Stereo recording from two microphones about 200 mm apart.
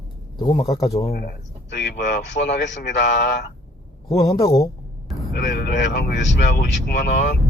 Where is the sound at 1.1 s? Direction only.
55° left (ahead or behind).